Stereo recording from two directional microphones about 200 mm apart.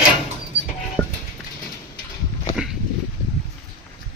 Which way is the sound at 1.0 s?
5° left (ahead or behind).